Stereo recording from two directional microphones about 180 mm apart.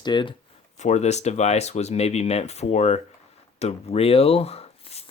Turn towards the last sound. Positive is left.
turn(degrees=35)  # may be behind; listen again after turning